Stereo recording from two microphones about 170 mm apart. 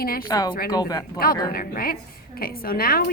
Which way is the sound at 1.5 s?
60° left (ahead or behind).